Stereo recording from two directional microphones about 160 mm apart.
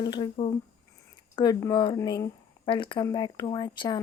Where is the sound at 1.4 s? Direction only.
30° left (ahead or behind).